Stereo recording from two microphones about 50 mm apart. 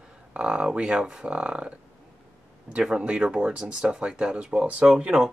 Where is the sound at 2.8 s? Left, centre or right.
Right.